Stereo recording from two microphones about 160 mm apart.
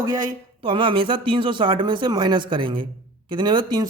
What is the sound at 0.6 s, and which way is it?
A man's voice, 30° right (ahead or behind).